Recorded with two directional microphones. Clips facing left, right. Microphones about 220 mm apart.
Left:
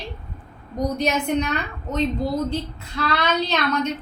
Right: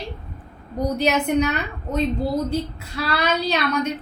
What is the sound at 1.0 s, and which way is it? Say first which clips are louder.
Speech: right 3 dB; 5° right (ahead or behind).